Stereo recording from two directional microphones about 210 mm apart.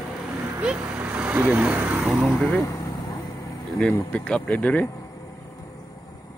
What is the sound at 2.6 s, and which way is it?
Vehicle, 15° left (ahead or behind).